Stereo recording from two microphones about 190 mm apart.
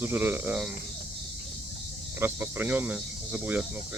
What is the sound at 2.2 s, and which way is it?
Speech, 10° right (ahead or behind).